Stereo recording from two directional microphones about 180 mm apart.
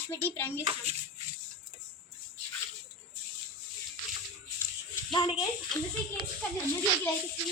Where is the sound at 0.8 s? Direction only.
35° right (ahead or behind).